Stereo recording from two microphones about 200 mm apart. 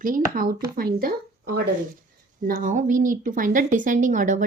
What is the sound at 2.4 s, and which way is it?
A woman's voice, 40° right (ahead or behind).